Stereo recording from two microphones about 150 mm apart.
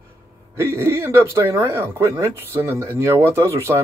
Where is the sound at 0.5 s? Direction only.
15° right (ahead or behind).